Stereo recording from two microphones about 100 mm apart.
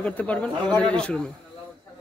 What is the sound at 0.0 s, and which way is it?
Speech, 15° left (ahead or behind).